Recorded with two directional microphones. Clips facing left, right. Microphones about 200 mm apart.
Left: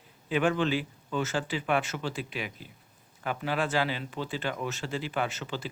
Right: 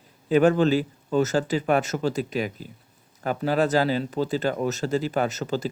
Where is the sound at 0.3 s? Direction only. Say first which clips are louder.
Right 8 dB; 40° right (ahead or behind).